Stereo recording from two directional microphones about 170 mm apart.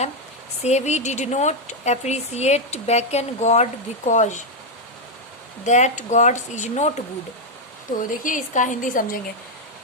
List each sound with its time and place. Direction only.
0.6 s speech: 40° left (ahead or behind)
5.6 s speech: 45° left (ahead or behind)
8.2 s speech: 50° left (ahead or behind)